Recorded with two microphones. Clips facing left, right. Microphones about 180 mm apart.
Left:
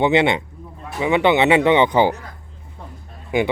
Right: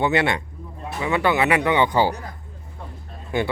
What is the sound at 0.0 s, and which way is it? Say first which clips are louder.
Speech: left 4 dB; 20° left (ahead or behind).